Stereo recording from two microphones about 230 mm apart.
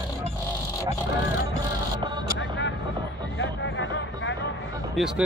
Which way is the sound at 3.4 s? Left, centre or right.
Left.